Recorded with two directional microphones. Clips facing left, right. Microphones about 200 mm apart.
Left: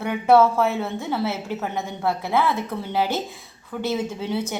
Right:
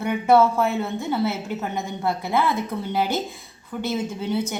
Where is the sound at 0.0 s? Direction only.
5° left (ahead or behind).